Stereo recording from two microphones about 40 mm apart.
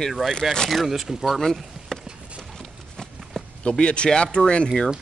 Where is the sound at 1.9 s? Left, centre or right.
Centre.